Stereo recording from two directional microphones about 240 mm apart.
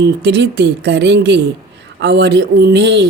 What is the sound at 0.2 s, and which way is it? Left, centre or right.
A woman's voice, right.